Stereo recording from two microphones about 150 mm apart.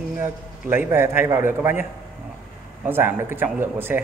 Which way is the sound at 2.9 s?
15° right (ahead or behind).